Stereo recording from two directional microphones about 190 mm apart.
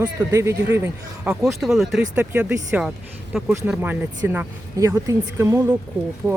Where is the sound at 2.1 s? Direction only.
10° right (ahead or behind).